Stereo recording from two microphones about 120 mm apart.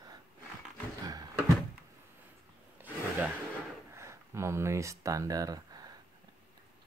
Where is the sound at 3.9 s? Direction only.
25° right (ahead or behind).